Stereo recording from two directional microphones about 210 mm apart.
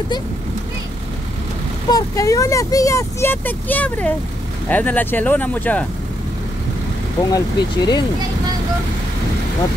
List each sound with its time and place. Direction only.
1.9 s speech: 15° left (ahead or behind)
7.3 s speech: 20° left (ahead or behind)